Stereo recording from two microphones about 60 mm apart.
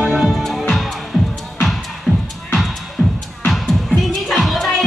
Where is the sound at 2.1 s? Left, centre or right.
Centre.